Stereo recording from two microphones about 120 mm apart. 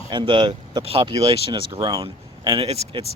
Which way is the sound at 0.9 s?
50° right (ahead or behind).